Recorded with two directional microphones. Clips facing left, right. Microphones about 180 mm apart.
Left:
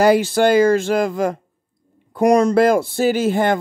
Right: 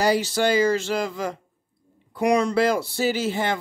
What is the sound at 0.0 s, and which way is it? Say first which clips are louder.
A man's voice: left 7 dB; 55° left (ahead or behind).